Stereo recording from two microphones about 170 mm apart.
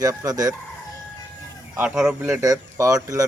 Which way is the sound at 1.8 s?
10° right (ahead or behind).